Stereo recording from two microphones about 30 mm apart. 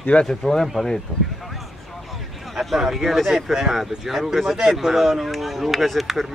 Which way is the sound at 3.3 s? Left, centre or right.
Centre.